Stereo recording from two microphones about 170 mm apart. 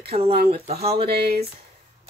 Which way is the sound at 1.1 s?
70° right (ahead or behind).